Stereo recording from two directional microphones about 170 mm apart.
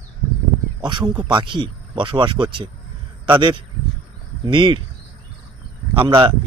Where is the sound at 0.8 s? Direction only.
25° right (ahead or behind).